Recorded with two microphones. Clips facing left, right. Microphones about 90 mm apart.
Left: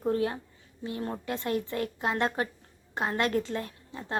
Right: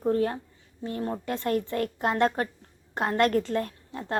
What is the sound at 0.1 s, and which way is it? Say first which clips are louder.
A woman's voice: right 3 dB; 40° right (ahead or behind).